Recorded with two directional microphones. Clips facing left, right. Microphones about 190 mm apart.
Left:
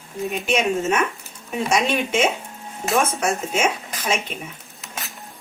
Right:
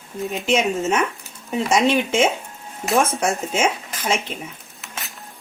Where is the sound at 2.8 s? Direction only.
Centre (ahead or behind).